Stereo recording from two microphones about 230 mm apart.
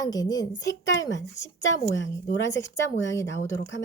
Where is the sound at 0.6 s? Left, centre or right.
Left.